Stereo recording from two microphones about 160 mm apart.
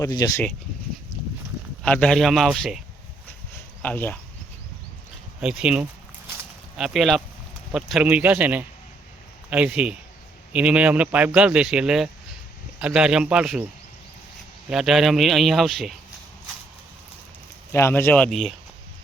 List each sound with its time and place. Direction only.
0.0 s speech: 25° left (ahead or behind)
1.8 s speech: 5° left (ahead or behind)
3.5 s a sound: 10° left (ahead or behind)
5.4 s a man's voice: 5° right (ahead or behind)
14.7 s speech: 5° right (ahead or behind)
17.7 s speech: 15° left (ahead or behind)